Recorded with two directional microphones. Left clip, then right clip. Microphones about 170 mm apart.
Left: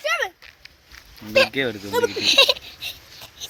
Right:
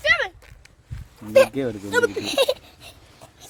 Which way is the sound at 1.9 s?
20° right (ahead or behind).